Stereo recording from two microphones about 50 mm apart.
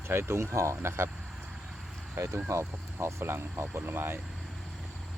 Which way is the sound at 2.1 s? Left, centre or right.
Right.